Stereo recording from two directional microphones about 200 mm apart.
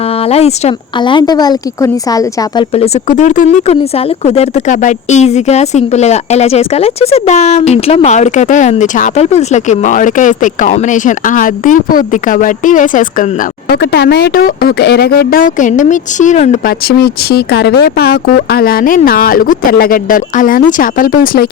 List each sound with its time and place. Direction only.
0.2 s speech: 30° left (ahead or behind)
2.7 s speech: 30° left (ahead or behind)
13.7 s speech: 55° left (ahead or behind)